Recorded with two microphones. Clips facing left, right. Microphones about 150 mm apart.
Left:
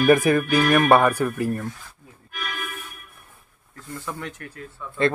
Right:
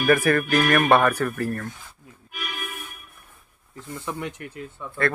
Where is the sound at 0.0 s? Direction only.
15° left (ahead or behind).